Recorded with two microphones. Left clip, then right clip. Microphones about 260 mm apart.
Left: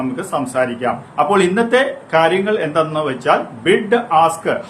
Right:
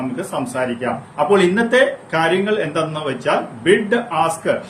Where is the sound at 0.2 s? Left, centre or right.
Centre.